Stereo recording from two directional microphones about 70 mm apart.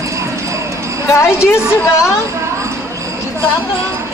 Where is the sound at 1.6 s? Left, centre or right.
Centre.